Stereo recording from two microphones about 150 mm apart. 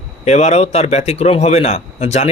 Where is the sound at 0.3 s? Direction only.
45° left (ahead or behind).